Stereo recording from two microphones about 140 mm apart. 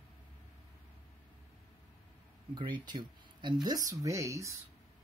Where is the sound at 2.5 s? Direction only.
35° right (ahead or behind).